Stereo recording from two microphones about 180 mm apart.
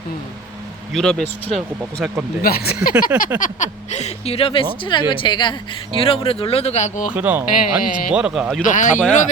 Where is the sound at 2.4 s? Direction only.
55° left (ahead or behind).